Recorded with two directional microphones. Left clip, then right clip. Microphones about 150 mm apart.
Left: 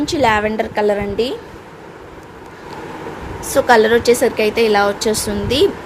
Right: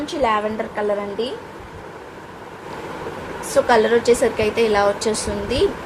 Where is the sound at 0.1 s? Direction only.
55° left (ahead or behind).